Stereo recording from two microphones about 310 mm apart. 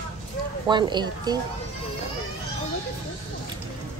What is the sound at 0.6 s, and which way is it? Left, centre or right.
Speech, centre.